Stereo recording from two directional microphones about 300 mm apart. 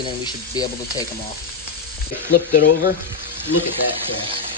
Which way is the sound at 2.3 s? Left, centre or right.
Left.